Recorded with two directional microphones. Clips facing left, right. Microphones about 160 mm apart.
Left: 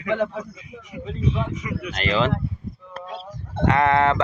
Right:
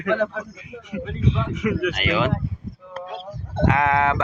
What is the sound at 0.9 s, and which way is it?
Speech, 90° right.